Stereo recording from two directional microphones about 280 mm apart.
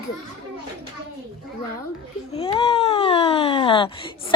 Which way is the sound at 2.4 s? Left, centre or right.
Left.